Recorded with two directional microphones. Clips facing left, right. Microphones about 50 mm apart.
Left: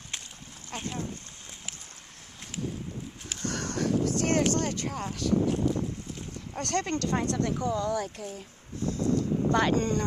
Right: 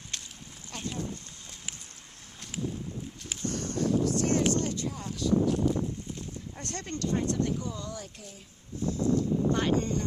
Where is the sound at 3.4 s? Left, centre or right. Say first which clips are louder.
Even; left.